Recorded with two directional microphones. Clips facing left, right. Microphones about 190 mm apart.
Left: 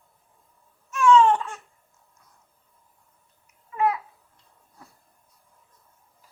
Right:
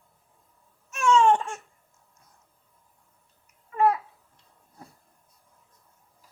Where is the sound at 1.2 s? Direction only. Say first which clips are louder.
Right 3 dB; 25° right (ahead or behind).